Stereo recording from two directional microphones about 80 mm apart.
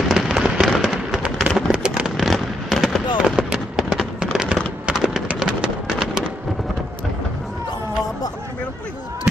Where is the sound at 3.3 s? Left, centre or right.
Centre.